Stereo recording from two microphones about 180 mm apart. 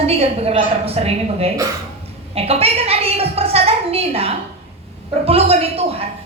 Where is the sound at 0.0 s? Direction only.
35° right (ahead or behind).